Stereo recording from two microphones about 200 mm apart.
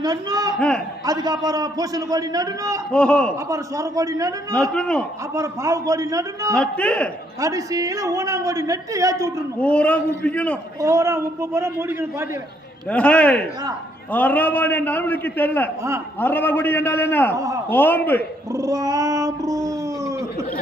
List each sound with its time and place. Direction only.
0.0 s a man's voice: 20° right (ahead or behind)
2.9 s a man's voice: 5° left (ahead or behind)
3.5 s a woman's voice: 15° right (ahead or behind)
4.7 s a man's voice: 5° left (ahead or behind)
5.3 s a woman's voice: 15° right (ahead or behind)
6.6 s a man's voice: 5° left (ahead or behind)
7.4 s a woman's voice: 15° right (ahead or behind)
9.6 s a man's voice: 5° left (ahead or behind)
10.8 s a woman's voice: 15° right (ahead or behind)
12.9 s a man's voice: 5° left (ahead or behind)
17.3 s a woman's voice: 15° right (ahead or behind)
17.7 s a man's voice: 10° left (ahead or behind)
18.5 s a sound: 15° right (ahead or behind)